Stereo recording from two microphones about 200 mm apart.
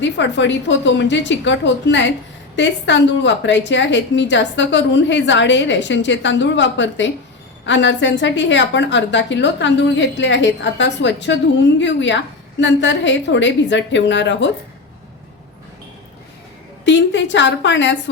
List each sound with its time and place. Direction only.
0.0 s a woman's voice: 65° left (ahead or behind)
16.8 s a woman's voice: 65° left (ahead or behind)